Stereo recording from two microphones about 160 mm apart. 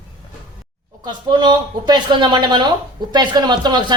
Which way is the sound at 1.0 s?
30° right (ahead or behind).